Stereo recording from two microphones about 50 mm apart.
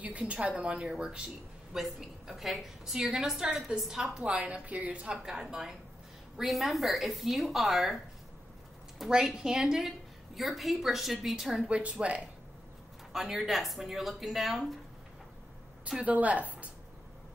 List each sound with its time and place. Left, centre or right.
0.0 s a woman's voice: right
1.7 s a woman's voice: centre
4.2 s a woman's voice: right
5.1 s a woman's voice: centre
9.1 s a woman's voice: centre
11.7 s a woman's voice: right
13.1 s a woman's voice: centre
16.0 s speech: right